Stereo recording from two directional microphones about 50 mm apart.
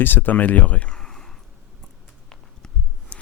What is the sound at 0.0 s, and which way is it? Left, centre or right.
Speech, left.